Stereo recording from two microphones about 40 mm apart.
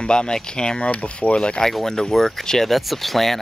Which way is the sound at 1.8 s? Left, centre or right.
Centre.